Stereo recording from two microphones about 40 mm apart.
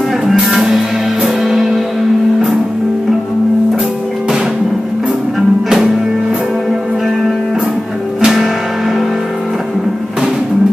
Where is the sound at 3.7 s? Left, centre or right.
Right.